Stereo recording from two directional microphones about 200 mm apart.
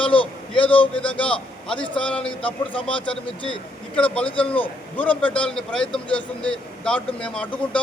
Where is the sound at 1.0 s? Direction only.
5° left (ahead or behind).